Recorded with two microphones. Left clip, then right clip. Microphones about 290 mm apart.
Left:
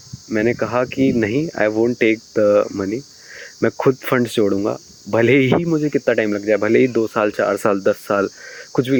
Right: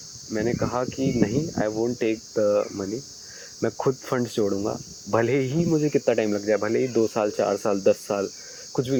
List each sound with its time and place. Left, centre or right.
0.3 s speech: left
5.7 s speech: left
6.9 s speech: left